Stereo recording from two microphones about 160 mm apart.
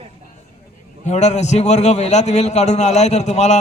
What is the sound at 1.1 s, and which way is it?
A man's voice, 45° left (ahead or behind).